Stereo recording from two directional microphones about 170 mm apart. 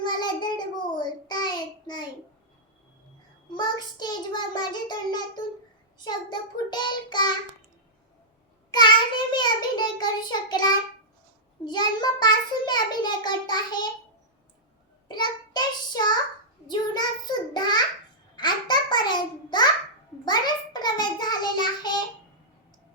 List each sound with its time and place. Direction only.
0.1 s child singing: 25° left (ahead or behind)
3.5 s a child's voice: 25° left (ahead or behind)
8.7 s a child's voice: 25° left (ahead or behind)
15.0 s child singing: 25° left (ahead or behind)
16.6 s a child's voice: 25° left (ahead or behind)